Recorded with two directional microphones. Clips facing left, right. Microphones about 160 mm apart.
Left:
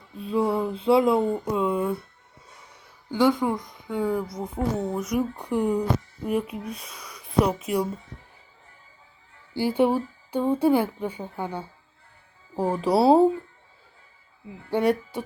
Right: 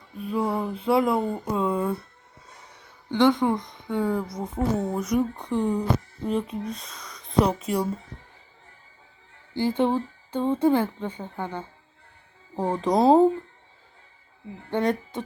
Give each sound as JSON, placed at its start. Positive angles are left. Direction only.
{"t": 0.2, "sound": "speech", "side_deg": 25}
{"t": 0.4, "sound": "a sound", "side_deg": -25}
{"t": 0.7, "sound": "speech", "side_deg": 25}
{"t": 1.5, "sound": "a woman's voice", "side_deg": 5}
{"t": 3.1, "sound": "a woman's voice", "side_deg": 10}
{"t": 9.6, "sound": "a woman's voice", "side_deg": 10}
{"t": 14.7, "sound": "a woman's voice", "side_deg": 10}